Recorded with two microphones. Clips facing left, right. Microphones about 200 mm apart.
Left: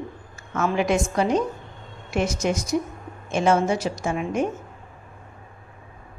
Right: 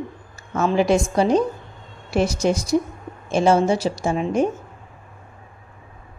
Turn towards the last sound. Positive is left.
turn(degrees=-30)  # may be behind; listen again after turning